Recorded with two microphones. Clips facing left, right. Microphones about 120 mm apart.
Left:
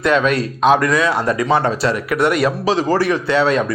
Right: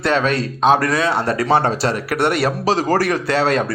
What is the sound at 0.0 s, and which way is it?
A man's voice, 30° right (ahead or behind).